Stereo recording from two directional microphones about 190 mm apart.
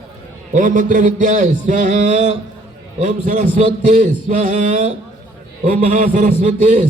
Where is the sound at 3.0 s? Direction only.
40° right (ahead or behind).